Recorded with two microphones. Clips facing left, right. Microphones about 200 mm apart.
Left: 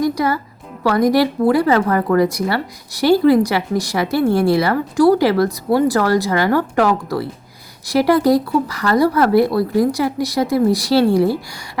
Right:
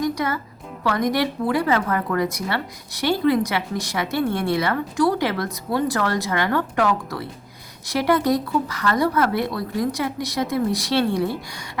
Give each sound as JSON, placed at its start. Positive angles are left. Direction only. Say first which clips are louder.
{"t": 0.0, "sound": "music", "louder": "left 6 dB", "side_deg": 35}
{"t": 0.9, "sound": "speech", "louder": "left 7 dB", "side_deg": 35}